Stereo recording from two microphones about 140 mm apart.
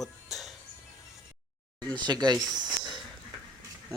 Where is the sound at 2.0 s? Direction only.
30° right (ahead or behind).